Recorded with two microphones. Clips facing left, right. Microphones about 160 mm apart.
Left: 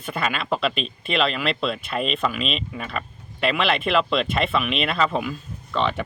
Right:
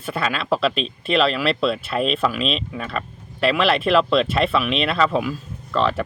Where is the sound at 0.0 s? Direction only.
Centre (ahead or behind).